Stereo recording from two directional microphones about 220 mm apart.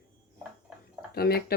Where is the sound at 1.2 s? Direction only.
45° left (ahead or behind).